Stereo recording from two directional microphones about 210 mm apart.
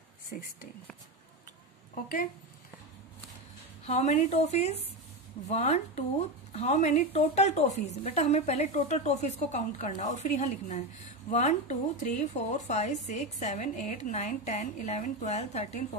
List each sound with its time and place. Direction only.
2.0 s speech: 40° left (ahead or behind)
3.8 s speech: 30° left (ahead or behind)